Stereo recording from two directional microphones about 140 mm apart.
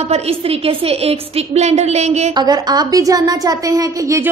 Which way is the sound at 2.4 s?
30° right (ahead or behind).